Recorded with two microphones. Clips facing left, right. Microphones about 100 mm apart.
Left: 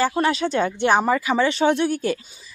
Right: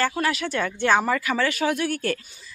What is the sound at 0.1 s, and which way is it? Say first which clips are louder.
A woman's voice: left 4 dB; 30° left (ahead or behind).